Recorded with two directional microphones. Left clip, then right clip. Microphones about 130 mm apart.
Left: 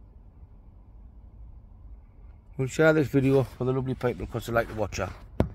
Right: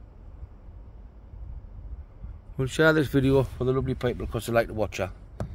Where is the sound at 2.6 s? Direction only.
15° left (ahead or behind).